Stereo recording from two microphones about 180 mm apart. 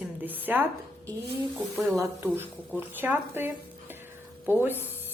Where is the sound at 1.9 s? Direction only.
15° right (ahead or behind).